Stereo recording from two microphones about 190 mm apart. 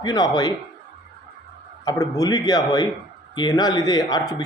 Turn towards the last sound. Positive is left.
turn(degrees=20)  # may be behind; listen again after turning